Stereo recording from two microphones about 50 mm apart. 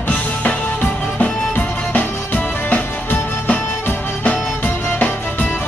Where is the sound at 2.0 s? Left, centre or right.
Left.